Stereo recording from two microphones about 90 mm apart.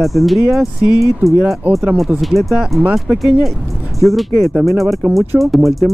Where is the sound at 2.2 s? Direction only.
Centre (ahead or behind).